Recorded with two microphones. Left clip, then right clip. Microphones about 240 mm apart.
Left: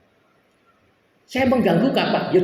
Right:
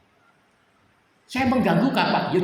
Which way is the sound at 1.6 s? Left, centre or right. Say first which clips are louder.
Left 2 dB; right.